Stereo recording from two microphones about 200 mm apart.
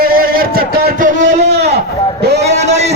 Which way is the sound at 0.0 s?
45° right (ahead or behind).